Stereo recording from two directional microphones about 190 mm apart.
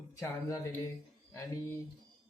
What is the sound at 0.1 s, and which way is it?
A man's voice, 15° left (ahead or behind).